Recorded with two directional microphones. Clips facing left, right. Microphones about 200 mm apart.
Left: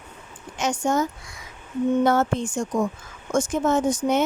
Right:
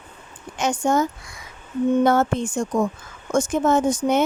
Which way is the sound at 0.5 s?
55° right (ahead or behind).